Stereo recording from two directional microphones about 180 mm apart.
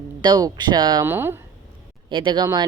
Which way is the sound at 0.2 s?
20° right (ahead or behind).